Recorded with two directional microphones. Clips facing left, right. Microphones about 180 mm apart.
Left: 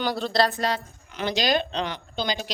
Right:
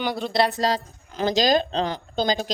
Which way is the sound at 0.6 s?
35° right (ahead or behind).